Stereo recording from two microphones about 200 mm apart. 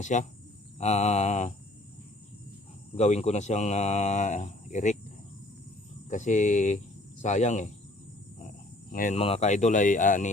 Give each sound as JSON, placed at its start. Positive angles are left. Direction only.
{"t": 0.0, "sound": "speech", "side_deg": 40}
{"t": 2.9, "sound": "speech", "side_deg": 35}
{"t": 6.1, "sound": "speech", "side_deg": 40}
{"t": 8.9, "sound": "speech", "side_deg": 45}
{"t": 9.1, "sound": "speech", "side_deg": 30}